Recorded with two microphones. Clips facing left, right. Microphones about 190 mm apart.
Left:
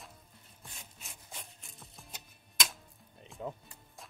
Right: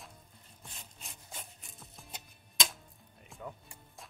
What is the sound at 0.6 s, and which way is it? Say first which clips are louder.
Wood: right 1 dB; centre (ahead or behind).